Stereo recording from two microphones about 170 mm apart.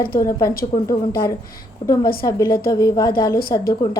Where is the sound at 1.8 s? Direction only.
30° left (ahead or behind).